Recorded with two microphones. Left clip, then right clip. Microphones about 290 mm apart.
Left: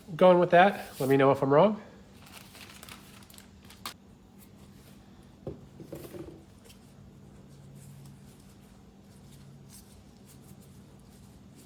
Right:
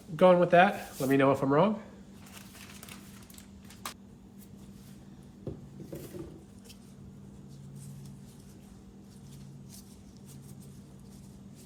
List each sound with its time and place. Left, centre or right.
0.2 s speech: left